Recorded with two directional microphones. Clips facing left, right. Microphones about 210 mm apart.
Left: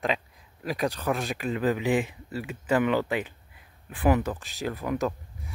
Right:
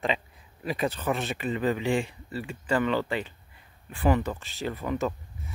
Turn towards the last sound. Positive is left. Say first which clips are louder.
# left 1 dB
turn(degrees=0)  # may be behind; listen again after turning